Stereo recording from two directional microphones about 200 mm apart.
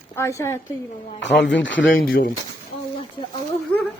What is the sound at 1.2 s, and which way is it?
Speech, 65° left (ahead or behind).